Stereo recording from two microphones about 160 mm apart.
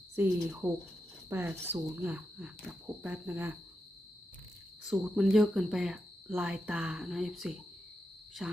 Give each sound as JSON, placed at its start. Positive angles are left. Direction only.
{"t": 0.2, "sound": "speech", "side_deg": -10}
{"t": 4.8, "sound": "speech", "side_deg": -5}
{"t": 8.3, "sound": "cricket", "side_deg": 0}